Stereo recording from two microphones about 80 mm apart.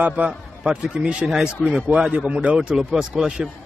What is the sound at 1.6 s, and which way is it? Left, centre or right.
Speech, centre.